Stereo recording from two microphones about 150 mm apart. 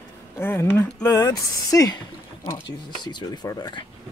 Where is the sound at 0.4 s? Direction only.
15° left (ahead or behind).